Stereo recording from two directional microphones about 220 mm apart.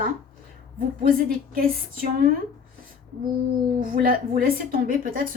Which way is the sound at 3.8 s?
40° right (ahead or behind).